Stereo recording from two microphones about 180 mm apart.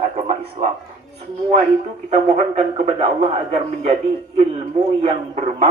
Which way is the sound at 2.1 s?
35° right (ahead or behind).